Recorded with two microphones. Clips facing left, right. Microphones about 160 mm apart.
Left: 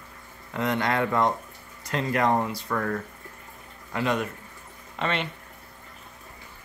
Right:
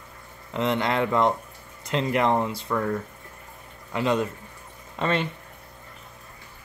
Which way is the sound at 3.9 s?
25° right (ahead or behind).